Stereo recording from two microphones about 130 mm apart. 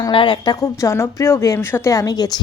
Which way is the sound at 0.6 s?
20° left (ahead or behind).